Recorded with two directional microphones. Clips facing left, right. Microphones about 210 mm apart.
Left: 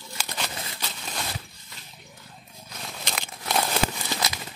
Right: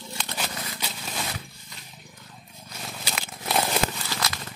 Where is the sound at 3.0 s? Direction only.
5° right (ahead or behind).